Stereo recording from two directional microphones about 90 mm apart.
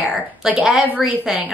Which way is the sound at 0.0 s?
10° right (ahead or behind).